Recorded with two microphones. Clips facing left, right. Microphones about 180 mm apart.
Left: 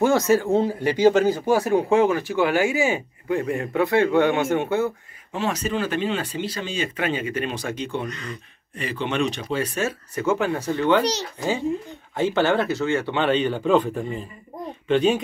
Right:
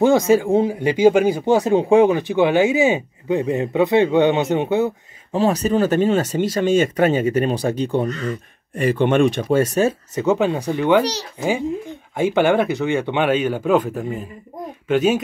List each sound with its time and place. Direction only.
0.0 s speech: 15° right (ahead or behind)
5.3 s speech: 35° right (ahead or behind)
8.2 s speech: 50° right (ahead or behind)
10.1 s speech: 20° right (ahead or behind)